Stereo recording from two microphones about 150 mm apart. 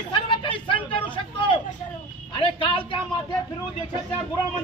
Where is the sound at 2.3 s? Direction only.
35° left (ahead or behind).